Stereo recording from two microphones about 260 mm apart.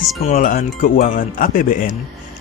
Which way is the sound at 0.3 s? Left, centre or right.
Left.